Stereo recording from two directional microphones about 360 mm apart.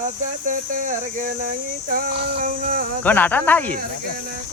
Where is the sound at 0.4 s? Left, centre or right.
Right.